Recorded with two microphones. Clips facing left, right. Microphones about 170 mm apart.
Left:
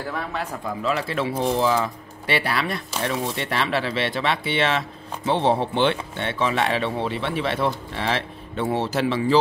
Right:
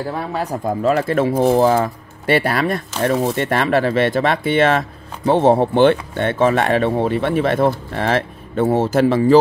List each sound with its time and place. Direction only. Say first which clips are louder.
0.1 s speech: right 6 dB; 40° right (ahead or behind)